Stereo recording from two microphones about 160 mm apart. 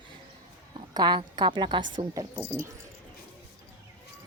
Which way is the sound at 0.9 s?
25° right (ahead or behind).